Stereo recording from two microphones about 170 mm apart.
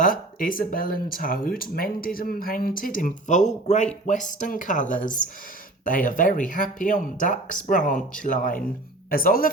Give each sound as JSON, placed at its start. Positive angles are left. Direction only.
{"t": 0.0, "sound": "speech", "side_deg": 55}